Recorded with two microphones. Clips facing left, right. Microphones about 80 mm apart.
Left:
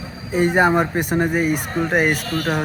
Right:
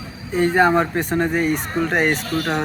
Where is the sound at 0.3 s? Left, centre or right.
Centre.